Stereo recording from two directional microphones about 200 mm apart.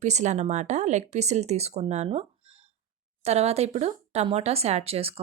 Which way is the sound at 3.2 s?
30° right (ahead or behind).